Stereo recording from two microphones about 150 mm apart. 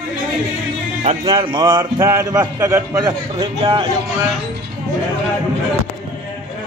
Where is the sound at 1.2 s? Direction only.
35° right (ahead or behind).